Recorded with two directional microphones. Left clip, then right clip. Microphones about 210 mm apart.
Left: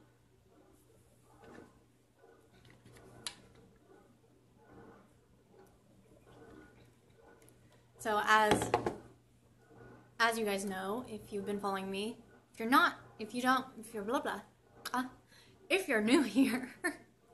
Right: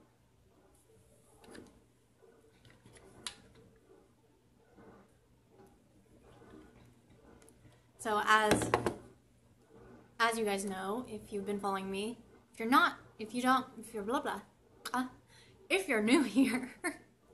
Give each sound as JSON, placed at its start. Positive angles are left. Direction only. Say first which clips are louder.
{"t": 8.0, "sound": "a woman's voice", "louder": "even", "side_deg": 0}
{"t": 8.6, "sound": "music", "louder": "right 1 dB", "side_deg": -30}
{"t": 10.1, "sound": "a woman's voice", "louder": "even", "side_deg": 0}